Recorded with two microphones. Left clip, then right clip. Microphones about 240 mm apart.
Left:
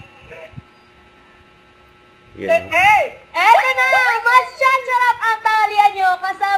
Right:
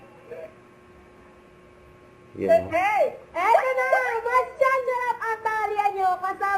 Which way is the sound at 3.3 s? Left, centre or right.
Centre.